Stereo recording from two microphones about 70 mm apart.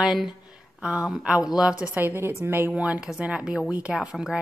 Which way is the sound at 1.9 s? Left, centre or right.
Right.